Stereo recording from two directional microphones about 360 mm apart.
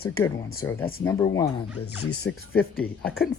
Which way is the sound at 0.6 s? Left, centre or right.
Centre.